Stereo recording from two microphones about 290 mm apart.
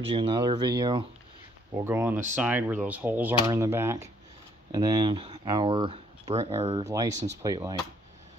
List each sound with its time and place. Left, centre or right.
0.1 s speech: centre